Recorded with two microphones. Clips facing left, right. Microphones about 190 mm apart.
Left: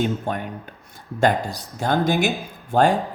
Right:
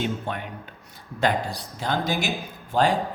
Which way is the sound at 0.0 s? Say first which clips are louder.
Left 5 dB; 45° left (ahead or behind).